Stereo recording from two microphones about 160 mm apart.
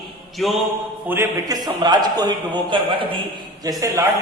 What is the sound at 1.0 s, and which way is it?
Speech, 15° right (ahead or behind).